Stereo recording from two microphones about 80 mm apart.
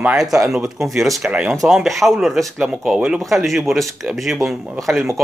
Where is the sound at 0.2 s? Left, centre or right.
Centre.